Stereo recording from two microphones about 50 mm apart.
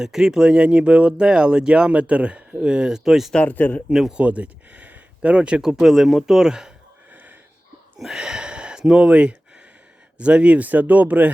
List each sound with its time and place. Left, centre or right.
0.0 s speech: centre
3.4 s speech: left
3.8 s speech: centre
4.2 s speech: right
5.6 s speech: centre
7.1 s wheeze: right
7.9 s a sound: centre
8.2 s a sound: centre
10.2 s speech: right